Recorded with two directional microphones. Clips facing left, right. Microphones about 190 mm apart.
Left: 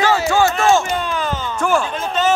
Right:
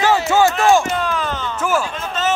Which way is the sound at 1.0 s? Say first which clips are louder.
Even; centre (ahead or behind).